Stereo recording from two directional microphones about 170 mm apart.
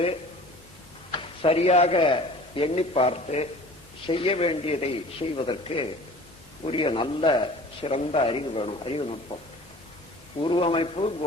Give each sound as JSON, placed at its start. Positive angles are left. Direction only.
{"t": 1.1, "sound": "a man's voice", "side_deg": 35}
{"t": 10.4, "sound": "a man's voice", "side_deg": 30}